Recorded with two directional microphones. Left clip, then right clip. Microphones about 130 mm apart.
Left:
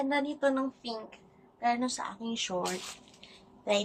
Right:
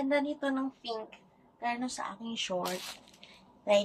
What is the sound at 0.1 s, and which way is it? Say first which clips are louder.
A woman's voice: left 1 dB; 30° left (ahead or behind).